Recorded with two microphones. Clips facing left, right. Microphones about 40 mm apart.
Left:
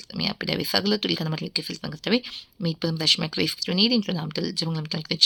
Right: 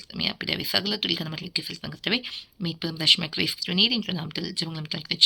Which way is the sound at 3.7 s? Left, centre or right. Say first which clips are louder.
Left 2 dB; right.